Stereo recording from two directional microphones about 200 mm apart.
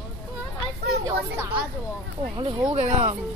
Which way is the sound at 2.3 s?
25° right (ahead or behind).